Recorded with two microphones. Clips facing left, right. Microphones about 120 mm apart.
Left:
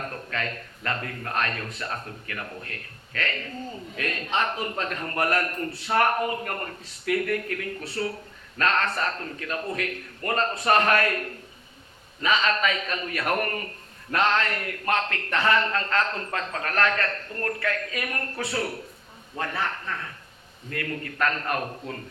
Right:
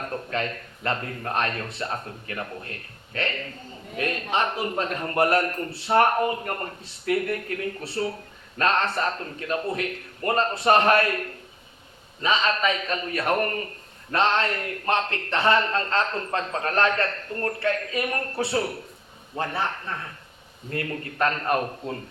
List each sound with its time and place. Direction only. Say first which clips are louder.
0.3 s a man's voice: right 3 dB; 30° right (ahead or behind)
12.2 s a man's voice: right 1 dB; 30° right (ahead or behind)